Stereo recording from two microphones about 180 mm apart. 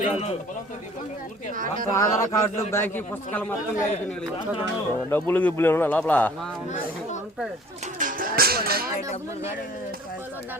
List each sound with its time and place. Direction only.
1.9 s a man's voice: 15° left (ahead or behind)
5.0 s a man's voice: 10° left (ahead or behind)
7.9 s speech: 50° right (ahead or behind)